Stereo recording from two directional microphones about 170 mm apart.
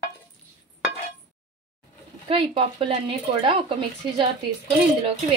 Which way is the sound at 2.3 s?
35° right (ahead or behind).